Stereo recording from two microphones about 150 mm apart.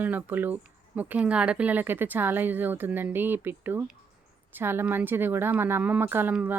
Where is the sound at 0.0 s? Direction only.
10° right (ahead or behind).